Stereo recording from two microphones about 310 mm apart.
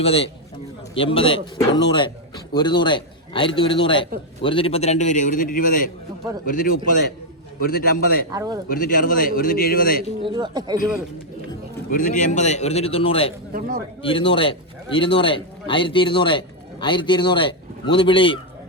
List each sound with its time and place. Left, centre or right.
0.0 s a man's voice: centre
8.3 s speech: centre
8.7 s a man's voice: left
10.2 s speech: centre
11.9 s a man's voice: left
13.5 s a man's voice: right
14.0 s a man's voice: centre